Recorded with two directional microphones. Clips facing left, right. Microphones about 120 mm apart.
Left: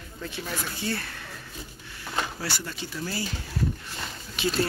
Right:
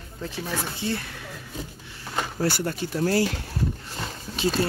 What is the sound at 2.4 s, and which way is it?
Speech, 50° right (ahead or behind).